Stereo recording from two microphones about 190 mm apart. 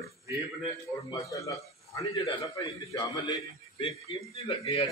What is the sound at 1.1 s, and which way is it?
A man's voice, 15° left (ahead or behind).